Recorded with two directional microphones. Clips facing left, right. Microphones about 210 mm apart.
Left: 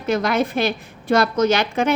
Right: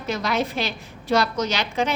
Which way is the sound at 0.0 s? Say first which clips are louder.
Left 5 dB; 55° left (ahead or behind).